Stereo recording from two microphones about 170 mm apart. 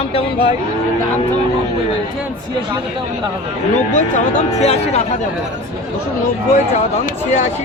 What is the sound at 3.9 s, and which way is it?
A man's voice, 45° left (ahead or behind).